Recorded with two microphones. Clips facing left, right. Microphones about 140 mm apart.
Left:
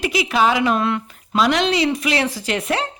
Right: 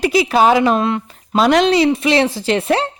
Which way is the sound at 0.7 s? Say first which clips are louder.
Right 3 dB; 25° right (ahead or behind).